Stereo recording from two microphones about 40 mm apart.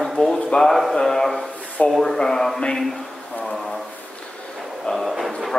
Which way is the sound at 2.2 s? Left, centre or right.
Centre.